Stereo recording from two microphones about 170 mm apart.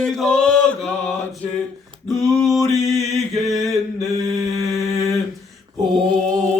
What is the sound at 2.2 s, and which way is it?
Mantra, centre (ahead or behind).